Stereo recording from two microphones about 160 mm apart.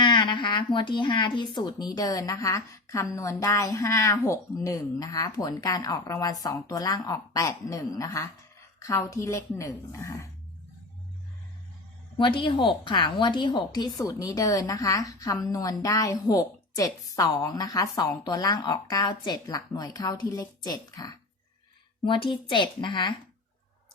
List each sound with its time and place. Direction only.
0.0 s a woman's voice: 30° left (ahead or behind)
12.1 s a woman's voice: 30° left (ahead or behind)